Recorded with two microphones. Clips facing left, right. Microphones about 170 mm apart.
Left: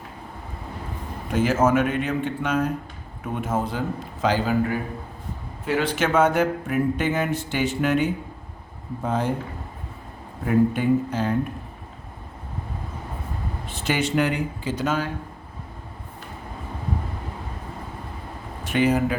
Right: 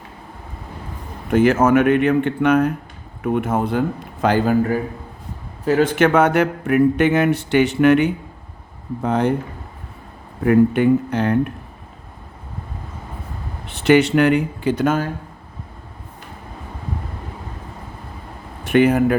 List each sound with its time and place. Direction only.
1.3 s speech: 60° right (ahead or behind)
5.6 s speech: 40° right (ahead or behind)
6.0 s speech: 65° right (ahead or behind)
10.4 s speech: 65° right (ahead or behind)
13.7 s speech: 65° right (ahead or behind); by 15.1 s 50° right (ahead or behind)
18.6 s speech: 60° right (ahead or behind)